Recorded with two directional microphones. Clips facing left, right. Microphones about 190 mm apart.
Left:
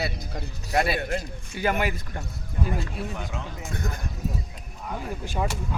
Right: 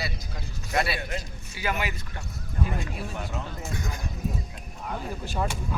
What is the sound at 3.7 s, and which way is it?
Speech, 55° left (ahead or behind).